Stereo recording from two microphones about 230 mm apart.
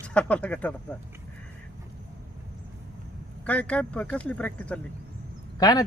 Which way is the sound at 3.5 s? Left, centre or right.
Centre.